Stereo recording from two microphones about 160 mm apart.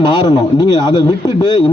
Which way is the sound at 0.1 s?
25° left (ahead or behind).